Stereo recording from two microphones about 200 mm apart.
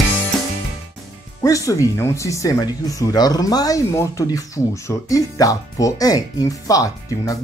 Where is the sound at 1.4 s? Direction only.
15° left (ahead or behind).